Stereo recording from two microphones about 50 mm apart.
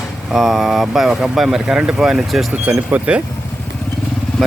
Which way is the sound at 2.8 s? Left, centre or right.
Right.